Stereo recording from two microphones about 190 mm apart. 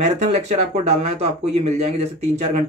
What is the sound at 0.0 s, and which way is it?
Speech, 35° right (ahead or behind).